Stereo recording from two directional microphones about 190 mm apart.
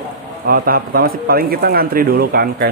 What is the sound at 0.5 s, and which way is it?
Speech, 50° right (ahead or behind).